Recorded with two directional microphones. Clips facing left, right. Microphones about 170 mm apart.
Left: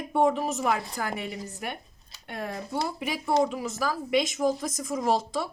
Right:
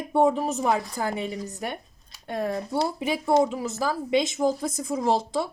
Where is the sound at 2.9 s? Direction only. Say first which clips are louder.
Right 3 dB; 25° right (ahead or behind).